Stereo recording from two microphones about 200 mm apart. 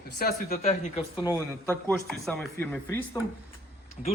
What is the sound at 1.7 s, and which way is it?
Speech, 5° left (ahead or behind).